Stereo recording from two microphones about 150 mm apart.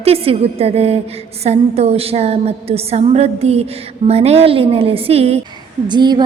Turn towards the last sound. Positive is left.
turn(degrees=-30)  # may be behind; listen again after turning